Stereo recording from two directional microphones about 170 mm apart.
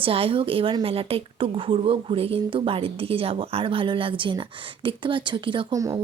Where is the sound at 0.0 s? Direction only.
35° right (ahead or behind).